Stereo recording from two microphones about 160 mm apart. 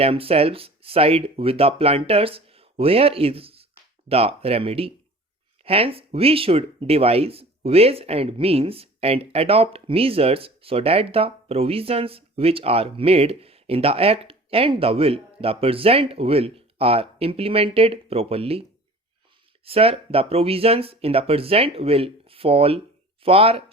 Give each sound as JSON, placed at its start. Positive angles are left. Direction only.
{"t": 0.0, "sound": "speech", "side_deg": -35}
{"t": 19.6, "sound": "speech", "side_deg": -35}